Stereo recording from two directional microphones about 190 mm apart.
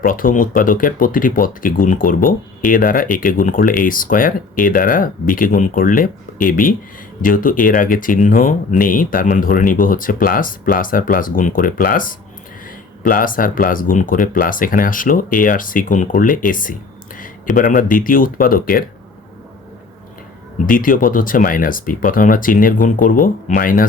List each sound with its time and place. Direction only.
0.0 s speech: 45° left (ahead or behind)
20.7 s speech: 45° left (ahead or behind)